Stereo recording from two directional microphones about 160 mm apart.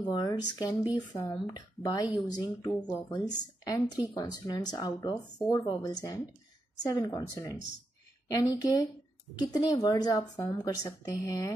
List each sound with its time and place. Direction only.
0.1 s speech: 25° left (ahead or behind)